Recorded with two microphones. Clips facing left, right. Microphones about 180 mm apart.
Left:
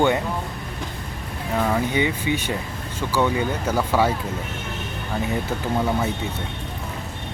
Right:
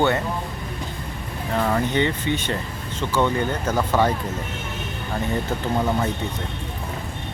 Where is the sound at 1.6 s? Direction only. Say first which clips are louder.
Even; 5° left (ahead or behind).